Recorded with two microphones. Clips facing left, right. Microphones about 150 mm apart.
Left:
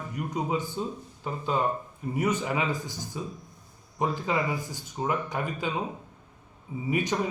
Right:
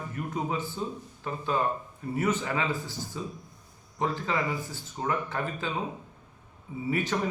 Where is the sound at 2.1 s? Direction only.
15° left (ahead or behind).